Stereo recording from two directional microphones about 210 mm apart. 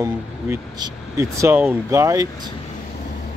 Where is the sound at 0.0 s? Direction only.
15° right (ahead or behind).